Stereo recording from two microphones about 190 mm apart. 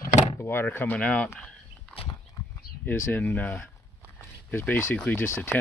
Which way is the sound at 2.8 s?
10° left (ahead or behind).